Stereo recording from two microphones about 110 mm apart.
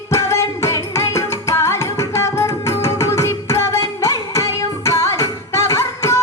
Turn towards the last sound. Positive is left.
turn(degrees=25)  # may be behind; listen again after turning